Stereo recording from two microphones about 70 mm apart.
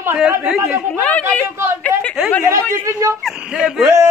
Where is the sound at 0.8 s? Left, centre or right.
Centre.